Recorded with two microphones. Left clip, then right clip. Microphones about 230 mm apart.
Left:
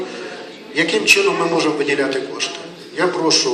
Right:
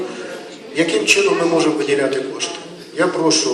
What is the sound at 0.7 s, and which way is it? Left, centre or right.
Speech, left.